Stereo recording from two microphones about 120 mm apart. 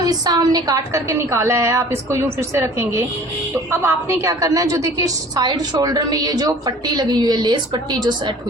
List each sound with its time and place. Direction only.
0.0 s a woman's voice: 35° right (ahead or behind)